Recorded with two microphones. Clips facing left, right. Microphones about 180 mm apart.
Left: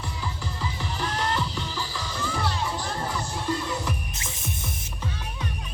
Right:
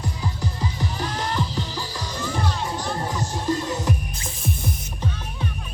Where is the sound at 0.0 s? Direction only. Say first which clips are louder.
Right 5 dB; 40° right (ahead or behind).